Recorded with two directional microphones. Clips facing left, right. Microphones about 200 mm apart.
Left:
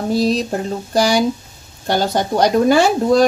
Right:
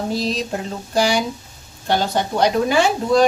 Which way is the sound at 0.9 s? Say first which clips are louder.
Left 3 dB; 40° left (ahead or behind).